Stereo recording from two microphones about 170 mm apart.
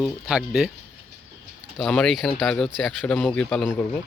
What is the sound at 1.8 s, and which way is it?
Speech, 5° left (ahead or behind).